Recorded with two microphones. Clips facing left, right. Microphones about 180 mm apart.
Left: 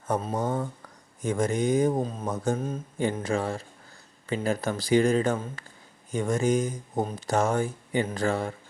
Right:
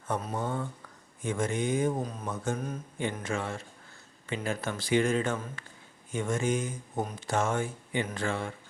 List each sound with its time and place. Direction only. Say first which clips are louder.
0.3 s speech: left 5 dB; 40° left (ahead or behind)